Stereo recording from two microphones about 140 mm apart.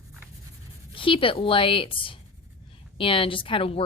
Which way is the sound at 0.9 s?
40° left (ahead or behind).